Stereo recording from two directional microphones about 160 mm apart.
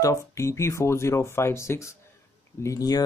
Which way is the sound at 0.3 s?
15° left (ahead or behind).